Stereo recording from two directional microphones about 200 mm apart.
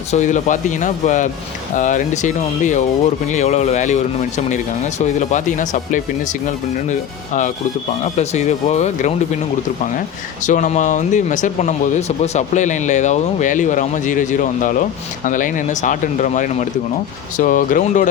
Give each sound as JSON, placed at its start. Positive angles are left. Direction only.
{"t": 0.1, "sound": "speech", "side_deg": 35}
{"t": 8.2, "sound": "speech", "side_deg": 35}
{"t": 10.4, "sound": "speech", "side_deg": 40}